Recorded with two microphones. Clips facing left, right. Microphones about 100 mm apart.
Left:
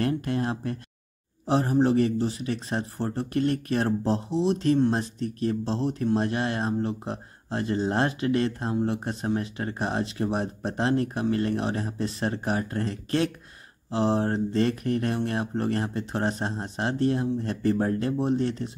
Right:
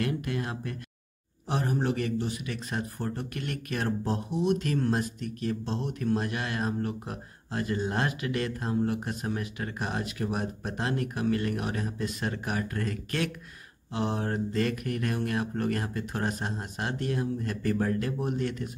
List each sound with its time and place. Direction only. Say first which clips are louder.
0.0 s a man's voice: left 4 dB; 35° left (ahead or behind)